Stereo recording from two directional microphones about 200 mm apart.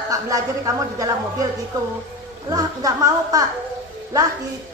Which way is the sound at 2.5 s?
20° right (ahead or behind).